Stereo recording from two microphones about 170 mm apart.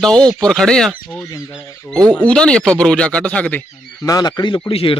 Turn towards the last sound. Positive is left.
turn(degrees=35)  # may be behind; listen again after turning